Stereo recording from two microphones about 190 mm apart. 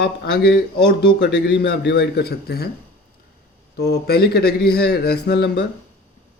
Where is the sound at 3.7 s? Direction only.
55° left (ahead or behind).